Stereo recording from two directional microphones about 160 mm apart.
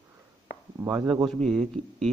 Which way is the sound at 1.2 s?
Centre (ahead or behind).